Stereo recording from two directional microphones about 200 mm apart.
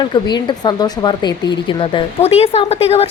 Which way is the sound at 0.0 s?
25° left (ahead or behind).